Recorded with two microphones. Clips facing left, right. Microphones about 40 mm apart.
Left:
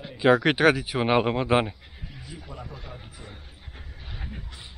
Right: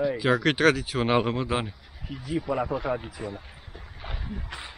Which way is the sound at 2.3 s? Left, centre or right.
Right.